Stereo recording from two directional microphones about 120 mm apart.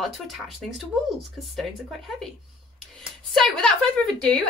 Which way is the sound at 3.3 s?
5° left (ahead or behind).